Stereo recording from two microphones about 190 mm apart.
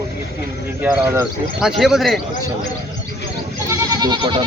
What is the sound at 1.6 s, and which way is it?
Speech, centre (ahead or behind).